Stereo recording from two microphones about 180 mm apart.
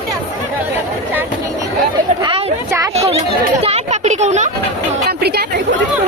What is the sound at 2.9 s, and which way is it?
Speech, 35° right (ahead or behind).